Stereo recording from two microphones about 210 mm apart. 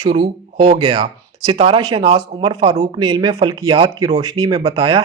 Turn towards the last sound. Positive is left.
turn(degrees=-20)  # may be behind; listen again after turning